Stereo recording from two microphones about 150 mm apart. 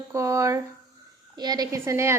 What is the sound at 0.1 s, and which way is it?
A woman's voice, 20° right (ahead or behind).